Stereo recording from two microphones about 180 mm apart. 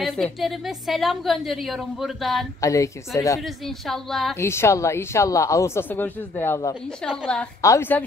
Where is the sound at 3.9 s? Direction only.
Centre (ahead or behind).